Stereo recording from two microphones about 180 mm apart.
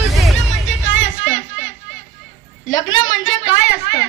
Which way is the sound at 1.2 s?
90° left.